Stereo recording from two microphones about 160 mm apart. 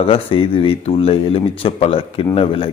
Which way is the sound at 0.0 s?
35° left (ahead or behind).